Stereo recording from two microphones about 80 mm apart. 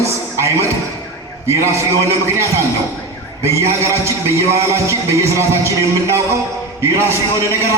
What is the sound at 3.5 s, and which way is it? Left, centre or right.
Speech, right.